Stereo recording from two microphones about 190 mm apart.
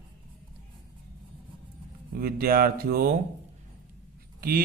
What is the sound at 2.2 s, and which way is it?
Speech, 50° right (ahead or behind).